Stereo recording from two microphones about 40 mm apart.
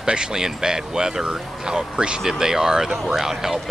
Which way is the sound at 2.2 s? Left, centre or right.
Centre.